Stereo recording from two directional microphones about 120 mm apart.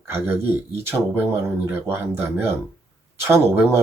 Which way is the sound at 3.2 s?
20° right (ahead or behind).